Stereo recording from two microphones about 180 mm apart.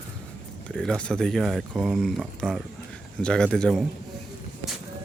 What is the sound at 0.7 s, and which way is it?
Speech, 5° left (ahead or behind).